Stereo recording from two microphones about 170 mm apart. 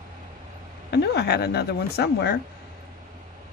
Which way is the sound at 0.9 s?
75° left (ahead or behind).